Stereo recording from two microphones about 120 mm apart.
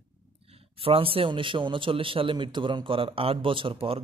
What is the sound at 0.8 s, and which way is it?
A man's voice, 50° right (ahead or behind).